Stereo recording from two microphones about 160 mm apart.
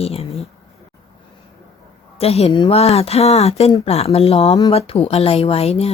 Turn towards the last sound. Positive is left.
turn(degrees=40)  # may be behind; listen again after turning